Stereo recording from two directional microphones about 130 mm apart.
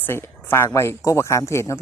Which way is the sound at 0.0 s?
15° left (ahead or behind).